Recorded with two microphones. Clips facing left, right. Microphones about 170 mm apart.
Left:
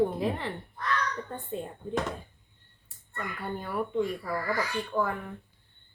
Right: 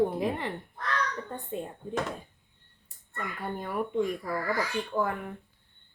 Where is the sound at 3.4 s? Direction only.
15° right (ahead or behind).